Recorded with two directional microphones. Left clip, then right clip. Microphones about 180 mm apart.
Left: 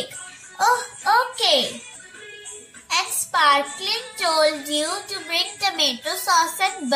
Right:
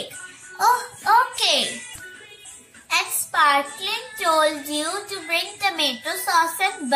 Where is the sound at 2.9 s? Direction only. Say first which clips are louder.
Even; 10° left (ahead or behind).